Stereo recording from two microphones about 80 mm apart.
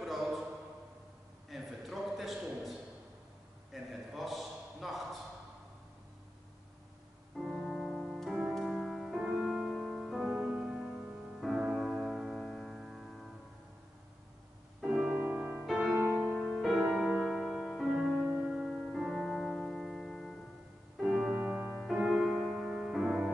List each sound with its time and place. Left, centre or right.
0.0 s a sound: centre
1.5 s a sound: centre
3.7 s a sound: centre
7.3 s music: centre
10.2 s music: centre
14.8 s music: centre
16.3 s music: centre
18.1 s music: right
18.4 s music: centre
21.1 s music: centre
21.7 s music: centre